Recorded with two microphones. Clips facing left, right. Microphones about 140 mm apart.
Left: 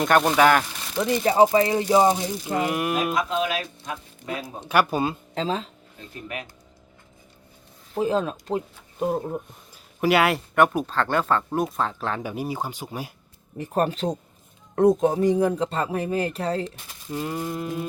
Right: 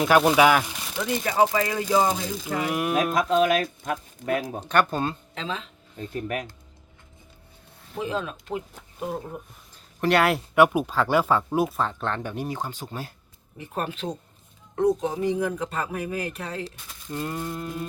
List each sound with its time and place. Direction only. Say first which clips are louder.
0.0 s speech: even; 5° right (ahead or behind)
0.9 s speech: left 4 dB; 30° left (ahead or behind)
2.6 s speech: even; centre (ahead or behind)
3.2 s speech: right 4 dB; 45° right (ahead or behind)
4.7 s speech: left 2 dB; 10° left (ahead or behind)
5.3 s speech: left 6 dB; 35° left (ahead or behind)
6.0 s speech: right 6 dB; 50° right (ahead or behind)
7.9 s speech: left 6 dB; 40° left (ahead or behind)
9.7 s speech: left 1 dB; 5° left (ahead or behind)
13.6 s speech: left 7 dB; 40° left (ahead or behind)
14.8 s speech: left 5 dB; 50° left (ahead or behind); by 16.6 s 35° left (ahead or behind)
17.1 s speech: left 2 dB; 5° left (ahead or behind)